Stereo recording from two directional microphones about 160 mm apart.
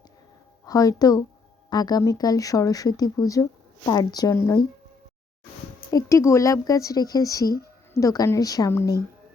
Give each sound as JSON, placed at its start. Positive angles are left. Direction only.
{"t": 0.6, "sound": "speech", "side_deg": 25}
{"t": 5.9, "sound": "speech", "side_deg": 20}